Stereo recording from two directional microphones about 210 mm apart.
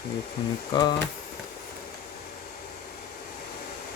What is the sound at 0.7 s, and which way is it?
Speech, 20° left (ahead or behind).